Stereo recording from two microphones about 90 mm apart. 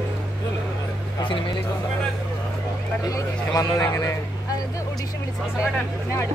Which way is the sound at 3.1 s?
40° left (ahead or behind).